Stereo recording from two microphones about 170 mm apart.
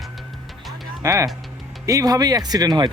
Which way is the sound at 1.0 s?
15° right (ahead or behind).